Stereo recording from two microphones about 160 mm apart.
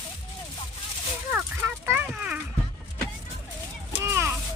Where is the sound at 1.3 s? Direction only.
15° right (ahead or behind).